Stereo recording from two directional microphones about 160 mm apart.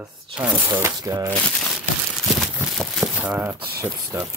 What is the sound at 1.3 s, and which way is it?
Speech, 5° left (ahead or behind).